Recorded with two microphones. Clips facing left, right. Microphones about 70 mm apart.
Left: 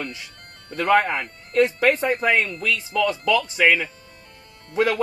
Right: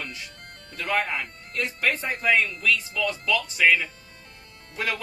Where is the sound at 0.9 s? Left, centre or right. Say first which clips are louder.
Left 5 dB; left.